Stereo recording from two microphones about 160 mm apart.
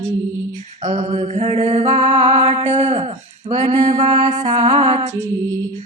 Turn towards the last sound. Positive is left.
turn(degrees=-40)  # may be behind; listen again after turning